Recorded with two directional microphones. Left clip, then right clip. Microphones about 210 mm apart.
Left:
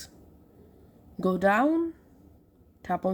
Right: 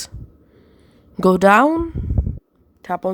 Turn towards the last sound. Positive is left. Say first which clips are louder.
# right 6 dB
turn(degrees=-50)  # may be behind; listen again after turning